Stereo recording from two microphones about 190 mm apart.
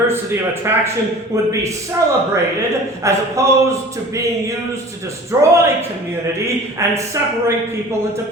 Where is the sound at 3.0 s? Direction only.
15° right (ahead or behind).